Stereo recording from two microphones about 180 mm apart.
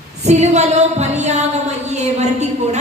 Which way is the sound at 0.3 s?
40° right (ahead or behind).